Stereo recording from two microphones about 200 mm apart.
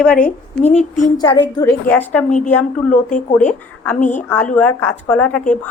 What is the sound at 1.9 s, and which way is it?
A woman's voice, 10° left (ahead or behind).